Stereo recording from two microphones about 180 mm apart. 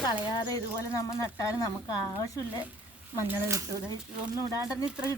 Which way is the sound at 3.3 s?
15° right (ahead or behind).